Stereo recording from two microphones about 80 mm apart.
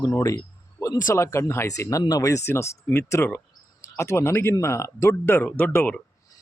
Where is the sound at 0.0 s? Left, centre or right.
Left.